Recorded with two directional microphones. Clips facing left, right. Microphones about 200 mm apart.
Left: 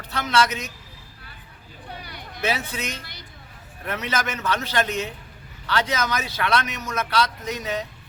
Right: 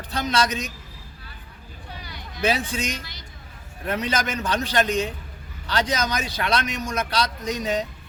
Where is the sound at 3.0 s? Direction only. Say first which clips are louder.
Right 1 dB; 55° left (ahead or behind).